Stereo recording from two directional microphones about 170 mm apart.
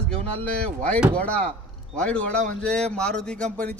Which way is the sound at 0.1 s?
35° right (ahead or behind).